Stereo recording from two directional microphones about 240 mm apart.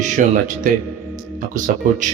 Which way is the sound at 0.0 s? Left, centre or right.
Right.